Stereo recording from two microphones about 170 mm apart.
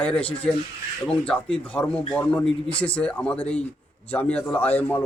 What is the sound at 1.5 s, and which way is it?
A man's voice, 5° left (ahead or behind).